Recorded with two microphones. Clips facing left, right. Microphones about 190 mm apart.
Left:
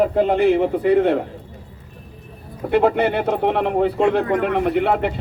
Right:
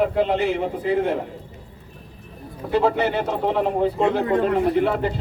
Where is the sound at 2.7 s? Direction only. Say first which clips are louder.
Left 3 dB; 55° left (ahead or behind).